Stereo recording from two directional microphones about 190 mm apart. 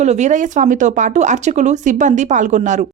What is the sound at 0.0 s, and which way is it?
Speech, 40° right (ahead or behind).